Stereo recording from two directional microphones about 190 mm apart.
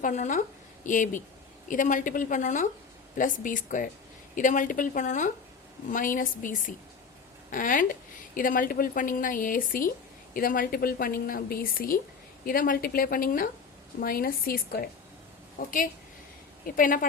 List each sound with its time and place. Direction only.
0.0 s a woman's voice: 40° left (ahead or behind)